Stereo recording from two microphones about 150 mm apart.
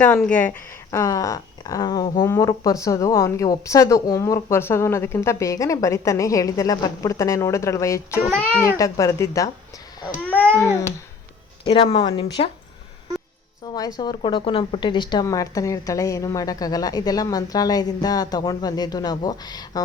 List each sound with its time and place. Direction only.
0.2 s speech: 10° left (ahead or behind)
0.9 s a woman's voice: 20° left (ahead or behind)
8.3 s speech: 5° left (ahead or behind)
8.8 s a woman's voice: 20° left (ahead or behind)
10.2 s a sound: 10° left (ahead or behind)
11.6 s speech: 35° left (ahead or behind)
13.7 s a woman's voice: 25° left (ahead or behind)